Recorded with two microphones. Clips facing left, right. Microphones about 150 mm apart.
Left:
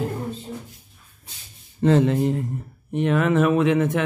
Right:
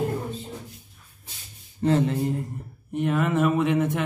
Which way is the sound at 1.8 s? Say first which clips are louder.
Left 4 dB; 90° left.